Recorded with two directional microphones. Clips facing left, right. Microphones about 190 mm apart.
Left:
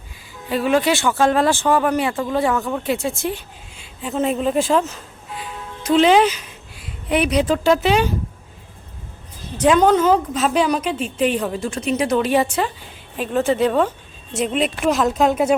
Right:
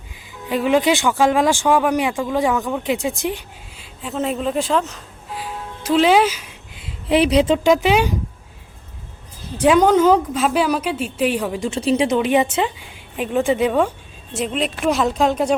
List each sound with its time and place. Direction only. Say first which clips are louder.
0.4 s a woman's voice: right 1 dB; 15° right (ahead or behind)
3.8 s a sound: left 2 dB; centre (ahead or behind)
6.7 s speech: right 3 dB; 25° right (ahead or behind)
9.6 s a woman's voice: right 1 dB; 10° right (ahead or behind)
11.7 s speech: right 5 dB; 30° right (ahead or behind)
12.0 s a woman's voice: left 3 dB; 15° right (ahead or behind)
14.3 s speech: left 2 dB; centre (ahead or behind)